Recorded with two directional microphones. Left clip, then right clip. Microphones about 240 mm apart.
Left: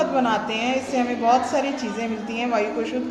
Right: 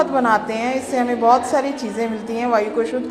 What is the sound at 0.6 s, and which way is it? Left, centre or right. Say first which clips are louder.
A woman's voice: right 3 dB; right.